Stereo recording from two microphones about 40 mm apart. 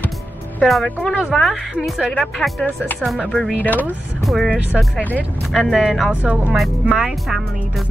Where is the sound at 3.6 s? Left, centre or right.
Left.